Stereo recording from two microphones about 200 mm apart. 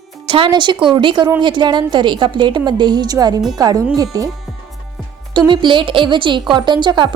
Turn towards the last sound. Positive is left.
turn(degrees=-25)  # may be behind; listen again after turning